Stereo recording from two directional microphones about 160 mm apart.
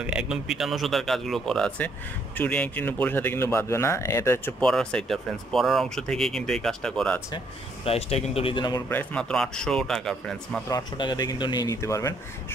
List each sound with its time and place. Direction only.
0.0 s speech: 5° right (ahead or behind)
7.8 s speech: 40° left (ahead or behind)
8.8 s speech: 10° left (ahead or behind)
10.7 s speech: 25° left (ahead or behind)